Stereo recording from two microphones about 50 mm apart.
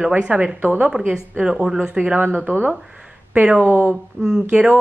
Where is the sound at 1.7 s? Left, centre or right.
Centre.